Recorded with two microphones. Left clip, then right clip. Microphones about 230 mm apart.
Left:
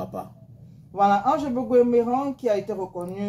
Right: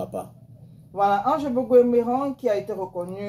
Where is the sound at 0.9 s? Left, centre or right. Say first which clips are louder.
Left 1 dB; left.